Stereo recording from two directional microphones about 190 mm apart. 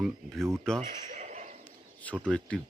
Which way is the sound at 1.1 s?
40° right (ahead or behind).